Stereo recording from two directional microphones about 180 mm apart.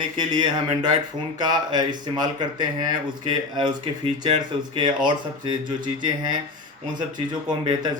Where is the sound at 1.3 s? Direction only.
25° right (ahead or behind).